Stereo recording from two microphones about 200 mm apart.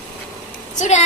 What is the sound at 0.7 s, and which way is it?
Speech, 35° left (ahead or behind).